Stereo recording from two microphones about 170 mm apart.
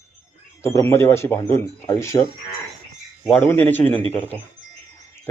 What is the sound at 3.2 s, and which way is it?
Speech, 5° left (ahead or behind).